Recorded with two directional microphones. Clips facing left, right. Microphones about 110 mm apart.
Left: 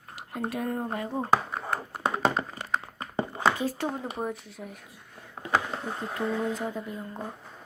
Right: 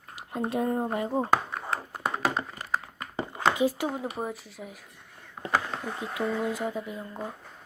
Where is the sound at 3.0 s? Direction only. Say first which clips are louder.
Left 3 dB; 25° left (ahead or behind).